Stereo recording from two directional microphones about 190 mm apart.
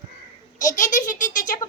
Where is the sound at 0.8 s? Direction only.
40° left (ahead or behind).